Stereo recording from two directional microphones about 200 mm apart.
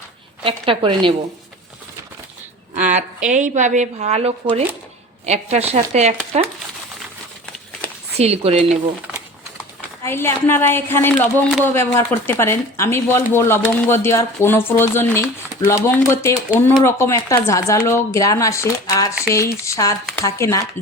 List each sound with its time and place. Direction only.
0.4 s a woman's voice: 25° right (ahead or behind)
2.7 s a woman's voice: 40° right (ahead or behind)
8.1 s speech: 30° right (ahead or behind)
10.0 s a woman's voice: 10° left (ahead or behind)